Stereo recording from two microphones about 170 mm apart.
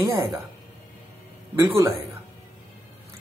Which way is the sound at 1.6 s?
15° right (ahead or behind).